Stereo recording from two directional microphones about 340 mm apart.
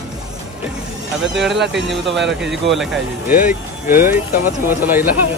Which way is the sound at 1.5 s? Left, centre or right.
Right.